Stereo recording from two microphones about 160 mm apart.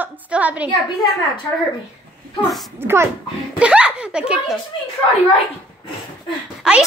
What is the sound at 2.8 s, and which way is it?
A child's voice, 15° right (ahead or behind).